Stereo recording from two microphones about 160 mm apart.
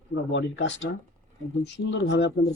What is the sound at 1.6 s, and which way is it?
Speech, 90° left.